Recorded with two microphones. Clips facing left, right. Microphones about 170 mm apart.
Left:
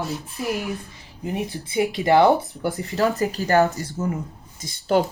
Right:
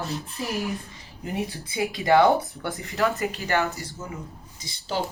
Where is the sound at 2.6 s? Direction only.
35° left (ahead or behind).